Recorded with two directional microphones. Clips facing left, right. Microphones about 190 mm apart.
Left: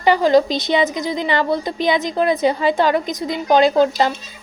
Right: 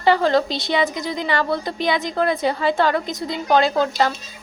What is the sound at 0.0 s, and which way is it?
A woman's voice, 15° left (ahead or behind).